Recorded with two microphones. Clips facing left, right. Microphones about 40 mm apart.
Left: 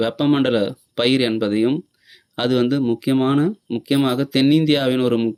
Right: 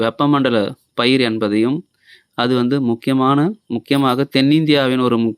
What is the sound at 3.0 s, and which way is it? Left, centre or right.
Speech, right.